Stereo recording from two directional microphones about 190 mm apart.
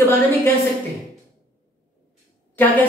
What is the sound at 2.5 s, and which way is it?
Speech, 10° left (ahead or behind).